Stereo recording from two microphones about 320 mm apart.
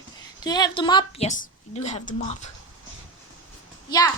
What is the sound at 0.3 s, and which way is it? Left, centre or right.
A woman's voice, centre.